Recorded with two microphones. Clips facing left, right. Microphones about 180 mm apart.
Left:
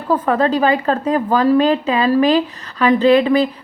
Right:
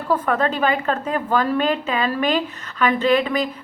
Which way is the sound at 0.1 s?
35° left (ahead or behind).